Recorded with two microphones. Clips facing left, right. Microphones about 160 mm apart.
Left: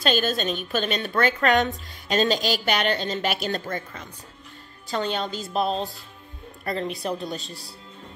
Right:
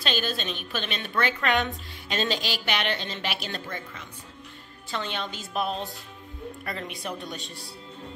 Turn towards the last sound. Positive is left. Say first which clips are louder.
# left 6 dB
turn(degrees=35)  # may be behind; listen again after turning